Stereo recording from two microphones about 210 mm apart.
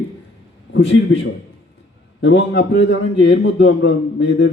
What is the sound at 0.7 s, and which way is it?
A man's voice, 55° left (ahead or behind).